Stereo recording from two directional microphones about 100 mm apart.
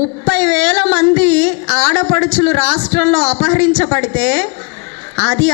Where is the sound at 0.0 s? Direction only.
15° left (ahead or behind).